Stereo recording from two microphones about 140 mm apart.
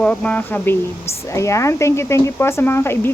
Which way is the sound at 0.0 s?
10° left (ahead or behind).